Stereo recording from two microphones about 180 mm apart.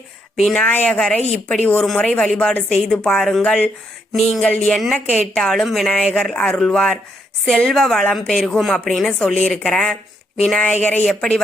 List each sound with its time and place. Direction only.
0.3 s a woman's voice: 5° left (ahead or behind)